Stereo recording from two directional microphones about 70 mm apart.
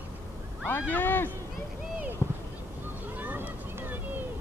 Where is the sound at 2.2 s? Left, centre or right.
Left.